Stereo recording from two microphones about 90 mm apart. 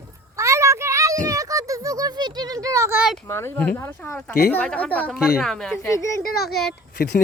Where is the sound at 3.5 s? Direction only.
20° left (ahead or behind).